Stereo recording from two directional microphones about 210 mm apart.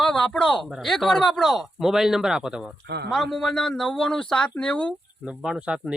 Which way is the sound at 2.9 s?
50° right (ahead or behind).